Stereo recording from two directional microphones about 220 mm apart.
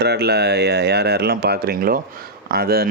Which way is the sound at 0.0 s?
50° right (ahead or behind).